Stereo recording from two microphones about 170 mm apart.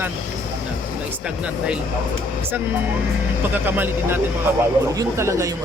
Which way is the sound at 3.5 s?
10° right (ahead or behind).